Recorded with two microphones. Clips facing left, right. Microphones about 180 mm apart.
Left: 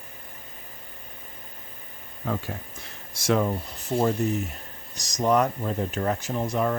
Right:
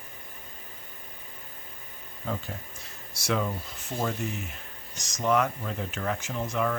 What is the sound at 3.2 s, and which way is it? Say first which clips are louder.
Speech: left 5 dB; 45° left (ahead or behind).